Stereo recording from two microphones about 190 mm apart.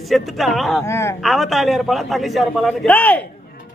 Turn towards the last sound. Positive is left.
turn(degrees=10)  # may be behind; listen again after turning